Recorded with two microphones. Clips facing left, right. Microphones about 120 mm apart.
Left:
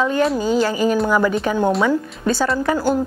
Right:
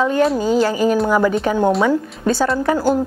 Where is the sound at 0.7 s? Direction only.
45° right (ahead or behind).